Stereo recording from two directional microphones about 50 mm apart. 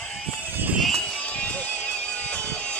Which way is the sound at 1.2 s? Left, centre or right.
Left.